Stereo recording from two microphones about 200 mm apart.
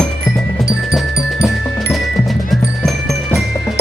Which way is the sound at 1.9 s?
Centre (ahead or behind).